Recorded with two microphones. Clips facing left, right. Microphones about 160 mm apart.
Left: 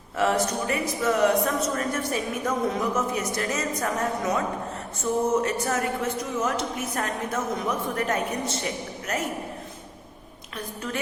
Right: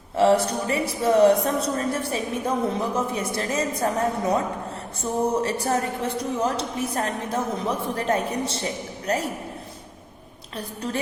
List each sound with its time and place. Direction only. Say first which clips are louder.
0.2 s speech: right 5 dB; 30° right (ahead or behind)
10.6 s speech: right 3 dB; 35° right (ahead or behind)